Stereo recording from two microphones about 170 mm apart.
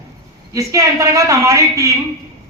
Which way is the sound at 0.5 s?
20° right (ahead or behind).